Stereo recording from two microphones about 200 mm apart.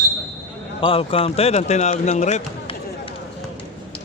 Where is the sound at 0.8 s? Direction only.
25° left (ahead or behind).